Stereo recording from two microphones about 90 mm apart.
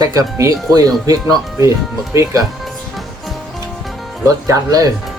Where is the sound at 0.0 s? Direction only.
35° right (ahead or behind).